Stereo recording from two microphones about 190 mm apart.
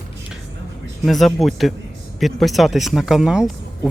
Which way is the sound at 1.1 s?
Centre (ahead or behind).